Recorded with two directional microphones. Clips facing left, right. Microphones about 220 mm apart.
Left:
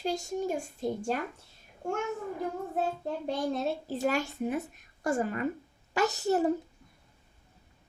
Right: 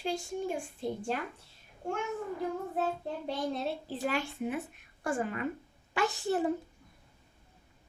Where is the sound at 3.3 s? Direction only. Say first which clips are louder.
Left 3 dB; 45° left (ahead or behind).